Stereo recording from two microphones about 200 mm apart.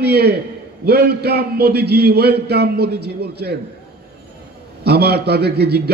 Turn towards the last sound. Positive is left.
turn(degrees=-55)  # may be behind; listen again after turning